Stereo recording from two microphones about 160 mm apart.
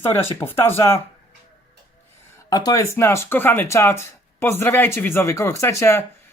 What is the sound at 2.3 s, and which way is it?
Speech, 25° left (ahead or behind).